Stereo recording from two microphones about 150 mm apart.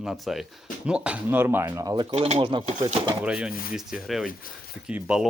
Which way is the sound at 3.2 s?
5° right (ahead or behind).